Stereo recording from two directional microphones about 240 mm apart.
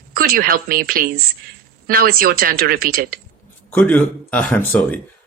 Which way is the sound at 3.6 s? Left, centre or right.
Centre.